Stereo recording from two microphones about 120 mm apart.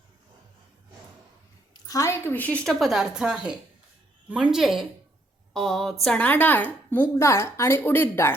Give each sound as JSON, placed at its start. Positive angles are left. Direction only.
{"t": 1.7, "sound": "a woman's voice", "side_deg": 30}